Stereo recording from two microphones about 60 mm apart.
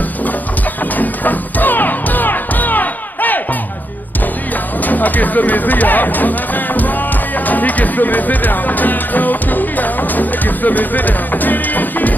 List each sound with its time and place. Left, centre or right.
0.9 s music: left
4.8 s speech: left